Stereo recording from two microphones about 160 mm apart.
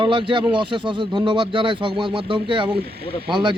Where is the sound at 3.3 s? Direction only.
30° right (ahead or behind).